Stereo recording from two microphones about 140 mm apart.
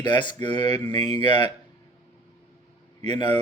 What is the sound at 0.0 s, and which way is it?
Speech, 30° left (ahead or behind).